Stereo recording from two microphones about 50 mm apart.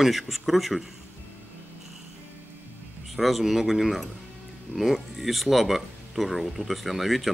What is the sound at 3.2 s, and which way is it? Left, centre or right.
Speech, centre.